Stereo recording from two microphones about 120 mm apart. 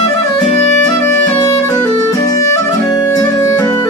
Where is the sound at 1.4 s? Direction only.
25° left (ahead or behind).